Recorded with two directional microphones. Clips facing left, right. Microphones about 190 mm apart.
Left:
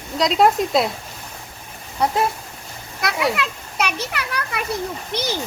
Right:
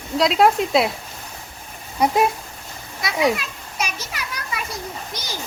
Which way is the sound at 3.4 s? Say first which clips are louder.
Left 5 dB; 65° left (ahead or behind).